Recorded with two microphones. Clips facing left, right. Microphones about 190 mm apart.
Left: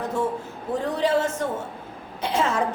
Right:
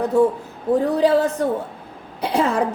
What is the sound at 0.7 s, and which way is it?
A woman's voice, 35° right (ahead or behind).